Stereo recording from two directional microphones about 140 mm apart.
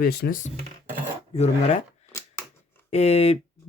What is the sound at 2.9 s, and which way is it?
Speech, 50° left (ahead or behind).